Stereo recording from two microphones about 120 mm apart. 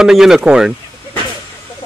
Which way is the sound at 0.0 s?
5° right (ahead or behind).